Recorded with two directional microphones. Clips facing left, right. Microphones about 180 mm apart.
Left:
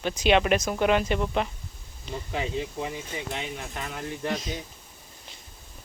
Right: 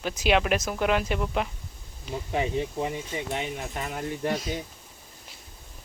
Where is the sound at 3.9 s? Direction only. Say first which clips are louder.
Right 2 dB; 15° right (ahead or behind).